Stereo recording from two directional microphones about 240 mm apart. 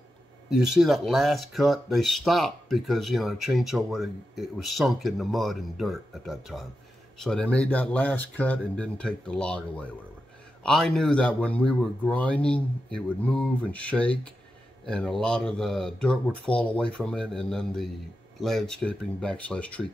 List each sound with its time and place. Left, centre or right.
0.5 s speech: centre